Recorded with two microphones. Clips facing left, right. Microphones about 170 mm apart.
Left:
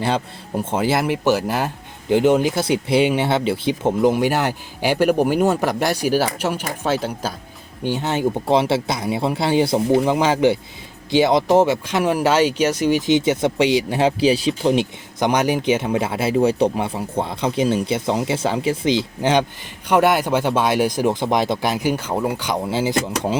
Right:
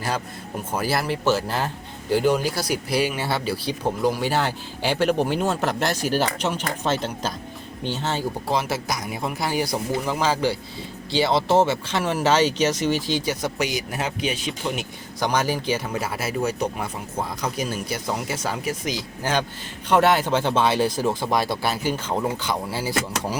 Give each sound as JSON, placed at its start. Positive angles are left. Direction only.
{"t": 0.0, "sound": "speech", "side_deg": 25}
{"t": 15.2, "sound": "speech", "side_deg": 20}
{"t": 19.9, "sound": "speech", "side_deg": 10}